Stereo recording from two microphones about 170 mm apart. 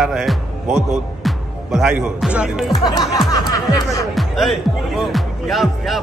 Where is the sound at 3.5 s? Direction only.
20° left (ahead or behind).